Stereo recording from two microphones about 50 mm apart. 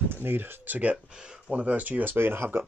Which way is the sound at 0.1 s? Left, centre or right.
Right.